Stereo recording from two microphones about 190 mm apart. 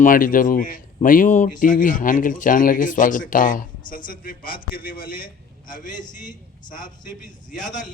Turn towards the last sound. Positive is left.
turn(degrees=40)  # may be behind; listen again after turning